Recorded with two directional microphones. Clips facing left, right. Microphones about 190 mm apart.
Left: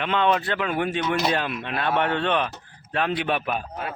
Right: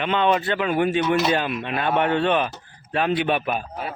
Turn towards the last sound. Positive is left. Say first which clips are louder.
# right 2 dB
turn(degrees=-5)  # may be behind; listen again after turning